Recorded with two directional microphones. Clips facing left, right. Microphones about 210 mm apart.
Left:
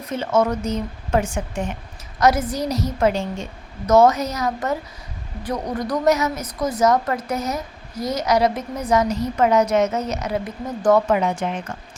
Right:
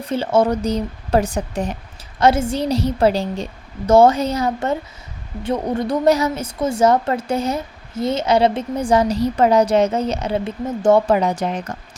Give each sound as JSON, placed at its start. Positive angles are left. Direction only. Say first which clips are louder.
{"t": 0.0, "sound": "a woman's voice", "louder": "right 3 dB", "side_deg": -30}